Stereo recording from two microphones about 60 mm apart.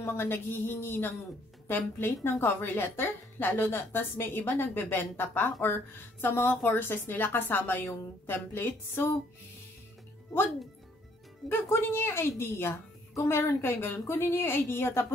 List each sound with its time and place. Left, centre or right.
0.0 s a woman's voice: left
11.9 s a woman's voice: left